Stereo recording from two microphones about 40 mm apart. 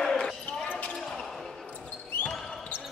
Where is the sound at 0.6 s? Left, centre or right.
Left.